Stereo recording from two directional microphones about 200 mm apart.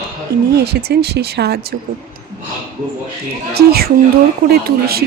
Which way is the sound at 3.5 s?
50° right (ahead or behind).